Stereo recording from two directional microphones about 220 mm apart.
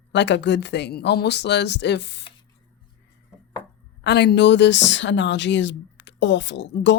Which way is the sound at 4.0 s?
50° left (ahead or behind).